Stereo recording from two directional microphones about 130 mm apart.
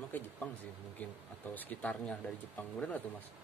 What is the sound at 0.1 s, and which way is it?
Speech, 15° left (ahead or behind).